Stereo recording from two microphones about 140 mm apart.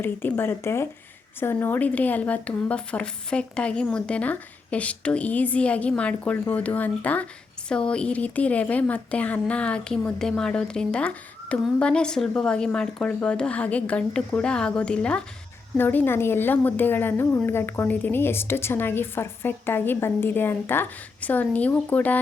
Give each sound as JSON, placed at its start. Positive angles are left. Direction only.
{"t": 0.0, "sound": "a woman's voice", "side_deg": 15}